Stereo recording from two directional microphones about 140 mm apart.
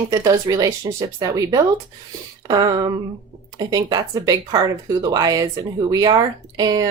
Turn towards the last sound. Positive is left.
turn(degrees=-25)  # may be behind; listen again after turning